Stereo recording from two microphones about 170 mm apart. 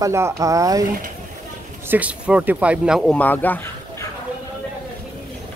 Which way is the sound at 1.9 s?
10° right (ahead or behind).